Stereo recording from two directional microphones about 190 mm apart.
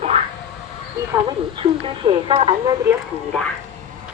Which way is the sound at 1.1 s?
25° right (ahead or behind).